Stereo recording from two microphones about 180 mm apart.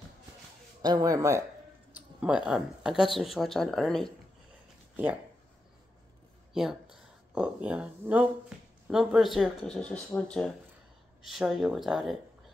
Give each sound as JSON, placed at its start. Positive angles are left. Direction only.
{"t": 0.8, "sound": "speech", "side_deg": -20}
{"t": 2.0, "sound": "speech", "side_deg": -5}
{"t": 6.5, "sound": "speech", "side_deg": -5}